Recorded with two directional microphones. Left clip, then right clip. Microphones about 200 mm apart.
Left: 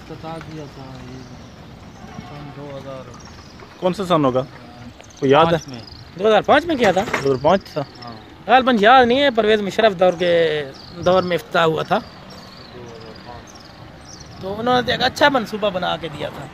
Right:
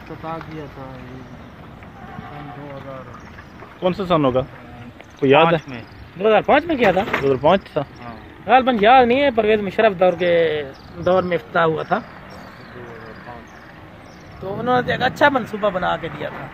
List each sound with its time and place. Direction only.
3.8 s speech: 5° left (ahead or behind)
6.1 s speech: 40° left (ahead or behind)
7.2 s speech: centre (ahead or behind)
8.5 s speech: 50° left (ahead or behind)
14.6 s speech: 30° left (ahead or behind); by 16.3 s 10° left (ahead or behind)